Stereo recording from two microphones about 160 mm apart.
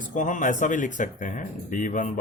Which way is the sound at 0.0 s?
55° left (ahead or behind).